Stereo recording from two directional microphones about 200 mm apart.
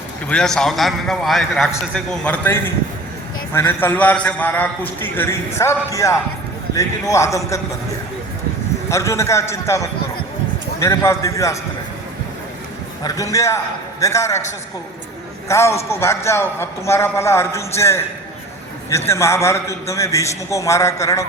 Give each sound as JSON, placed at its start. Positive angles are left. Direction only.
{"t": 0.3, "sound": "a man's voice", "side_deg": 5}
{"t": 8.9, "sound": "a man's voice", "side_deg": 15}
{"t": 13.0, "sound": "a man's voice", "side_deg": 15}
{"t": 15.4, "sound": "a man's voice", "side_deg": 15}